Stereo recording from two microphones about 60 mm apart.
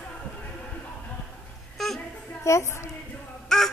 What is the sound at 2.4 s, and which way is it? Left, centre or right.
Speech, left.